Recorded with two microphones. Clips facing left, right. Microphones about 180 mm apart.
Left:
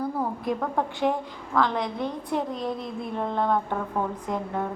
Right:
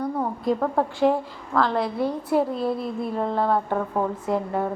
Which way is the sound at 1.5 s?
5° right (ahead or behind).